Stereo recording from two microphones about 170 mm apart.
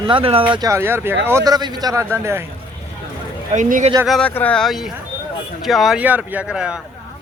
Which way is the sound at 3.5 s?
50° right (ahead or behind).